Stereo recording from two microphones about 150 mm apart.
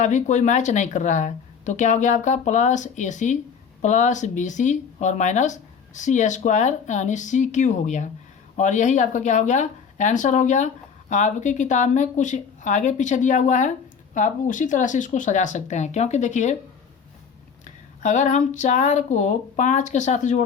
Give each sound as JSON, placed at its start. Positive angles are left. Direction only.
{"t": 0.0, "sound": "speech", "side_deg": 55}
{"t": 18.0, "sound": "speech", "side_deg": 55}